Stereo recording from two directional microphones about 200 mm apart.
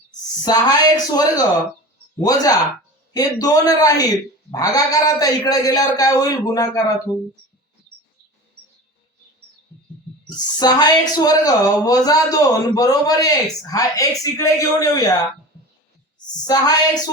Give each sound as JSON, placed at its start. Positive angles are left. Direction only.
{"t": 0.4, "sound": "speech", "side_deg": 20}
{"t": 10.2, "sound": "speech", "side_deg": 20}
{"t": 16.5, "sound": "speech", "side_deg": 20}